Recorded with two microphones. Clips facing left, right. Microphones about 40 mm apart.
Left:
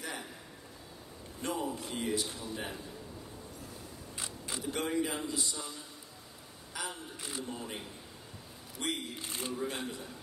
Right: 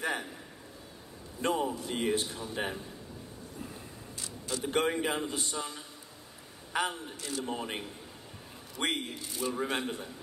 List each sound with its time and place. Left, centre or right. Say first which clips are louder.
1.4 s a man's voice: right 5 dB; right
4.6 s a man's voice: right 4 dB; right
7.2 s speech: right 4 dB; left
7.4 s a man's voice: right 5 dB; right
9.2 s a man's voice: right 4 dB; left
9.5 s a man's voice: right 5 dB; right